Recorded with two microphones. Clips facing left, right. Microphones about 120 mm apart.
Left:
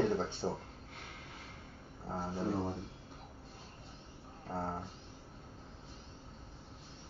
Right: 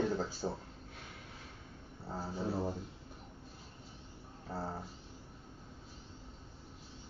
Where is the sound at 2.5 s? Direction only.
5° right (ahead or behind).